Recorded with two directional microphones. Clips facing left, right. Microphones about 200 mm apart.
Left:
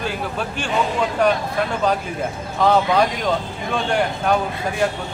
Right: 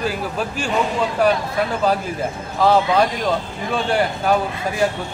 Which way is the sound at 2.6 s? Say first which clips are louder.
Right 1 dB; centre (ahead or behind).